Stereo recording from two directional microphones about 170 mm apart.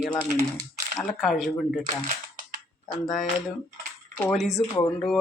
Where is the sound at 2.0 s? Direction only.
55° right (ahead or behind).